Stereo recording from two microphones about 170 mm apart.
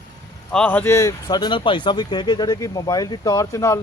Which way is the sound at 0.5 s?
10° left (ahead or behind).